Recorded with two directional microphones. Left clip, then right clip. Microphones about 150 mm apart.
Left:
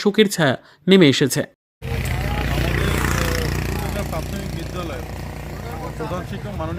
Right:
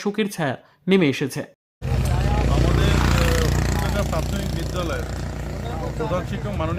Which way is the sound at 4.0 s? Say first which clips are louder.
Right 2 dB; 5° right (ahead or behind).